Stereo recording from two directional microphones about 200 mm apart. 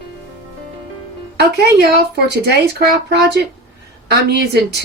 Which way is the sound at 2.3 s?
55° right (ahead or behind).